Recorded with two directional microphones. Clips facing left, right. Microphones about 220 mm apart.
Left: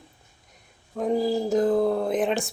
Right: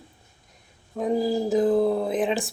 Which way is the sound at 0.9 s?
5° right (ahead or behind).